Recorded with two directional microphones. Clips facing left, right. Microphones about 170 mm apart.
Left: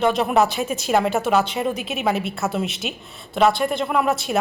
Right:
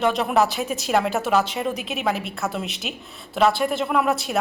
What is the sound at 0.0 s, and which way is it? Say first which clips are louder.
A woman's voice: left 2 dB; centre (ahead or behind).